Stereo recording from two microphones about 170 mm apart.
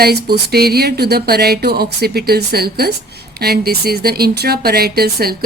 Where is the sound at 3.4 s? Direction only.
65° right (ahead or behind).